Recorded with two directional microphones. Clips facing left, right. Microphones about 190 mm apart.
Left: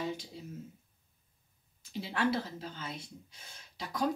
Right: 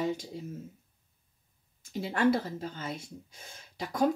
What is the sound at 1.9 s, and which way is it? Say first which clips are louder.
A woman's voice: right 5 dB; 45° right (ahead or behind).